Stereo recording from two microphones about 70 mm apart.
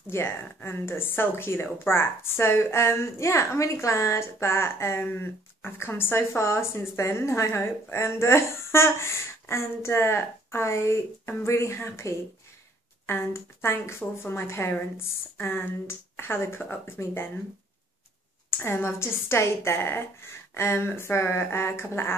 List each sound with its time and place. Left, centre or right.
0.1 s speech: left
18.6 s speech: left